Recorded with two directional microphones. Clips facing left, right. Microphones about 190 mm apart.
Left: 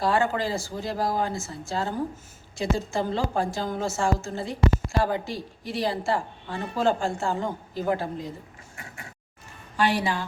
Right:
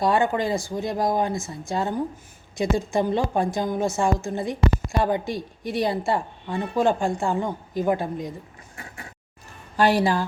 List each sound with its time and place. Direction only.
0.0 s a woman's voice: 20° right (ahead or behind)
9.7 s a woman's voice: 40° right (ahead or behind)